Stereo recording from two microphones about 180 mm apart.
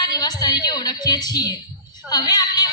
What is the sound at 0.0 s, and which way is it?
A woman's voice, 20° left (ahead or behind).